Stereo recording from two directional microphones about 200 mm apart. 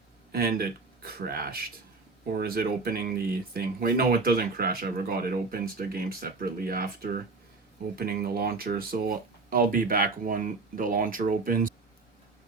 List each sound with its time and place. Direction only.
0.3 s speech: 50° right (ahead or behind)